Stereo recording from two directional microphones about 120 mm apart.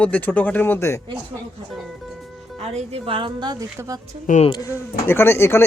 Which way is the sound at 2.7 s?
60° right (ahead or behind).